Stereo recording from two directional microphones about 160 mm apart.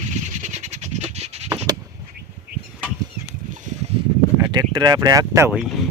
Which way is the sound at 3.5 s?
55° right (ahead or behind).